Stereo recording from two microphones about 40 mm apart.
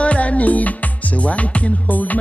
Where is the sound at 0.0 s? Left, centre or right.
Left.